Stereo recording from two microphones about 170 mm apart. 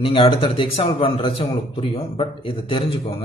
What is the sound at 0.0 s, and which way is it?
Speech, 30° left (ahead or behind).